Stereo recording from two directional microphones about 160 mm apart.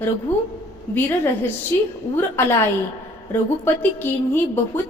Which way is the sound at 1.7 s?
15° left (ahead or behind).